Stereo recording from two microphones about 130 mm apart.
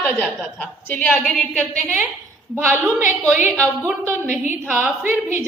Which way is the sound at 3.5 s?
10° left (ahead or behind).